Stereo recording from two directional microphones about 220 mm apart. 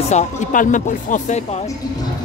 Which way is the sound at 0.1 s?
35° left (ahead or behind).